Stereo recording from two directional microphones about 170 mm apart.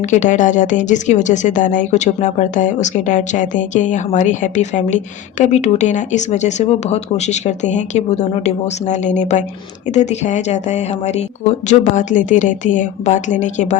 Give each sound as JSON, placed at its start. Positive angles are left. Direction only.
{"t": 0.1, "sound": "speech", "side_deg": 45}